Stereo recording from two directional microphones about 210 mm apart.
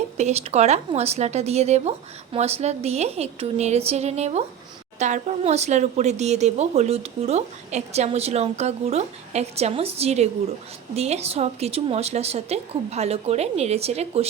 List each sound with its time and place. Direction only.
0.2 s speech: 30° right (ahead or behind)